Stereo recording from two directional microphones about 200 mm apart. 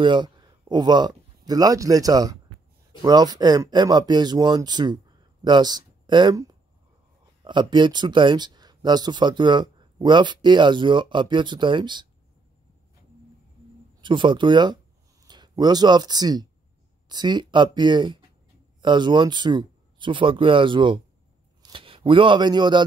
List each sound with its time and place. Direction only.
0.0 s speech: 20° right (ahead or behind)
14.0 s speech: 25° right (ahead or behind)